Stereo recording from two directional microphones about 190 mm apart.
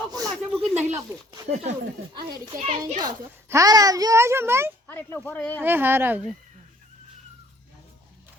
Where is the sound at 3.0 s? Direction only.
20° right (ahead or behind).